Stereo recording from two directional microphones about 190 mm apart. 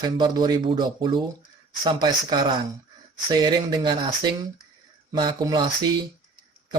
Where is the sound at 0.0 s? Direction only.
20° right (ahead or behind).